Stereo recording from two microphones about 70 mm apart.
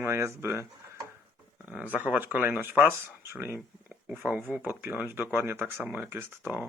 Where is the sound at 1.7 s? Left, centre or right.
Centre.